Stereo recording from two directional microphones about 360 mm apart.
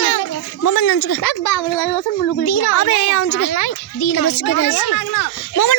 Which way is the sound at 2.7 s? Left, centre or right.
Left.